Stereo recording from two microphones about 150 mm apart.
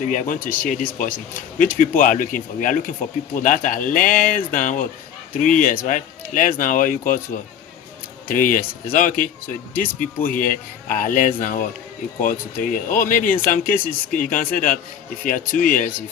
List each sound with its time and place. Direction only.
0.0 s speech: 60° left (ahead or behind)
8.3 s speech: 65° left (ahead or behind)